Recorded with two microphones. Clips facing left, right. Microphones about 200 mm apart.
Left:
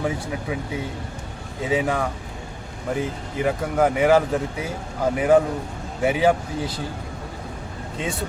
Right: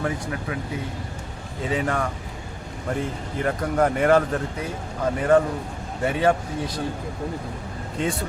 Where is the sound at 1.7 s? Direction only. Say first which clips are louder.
Left 3 dB; 10° left (ahead or behind).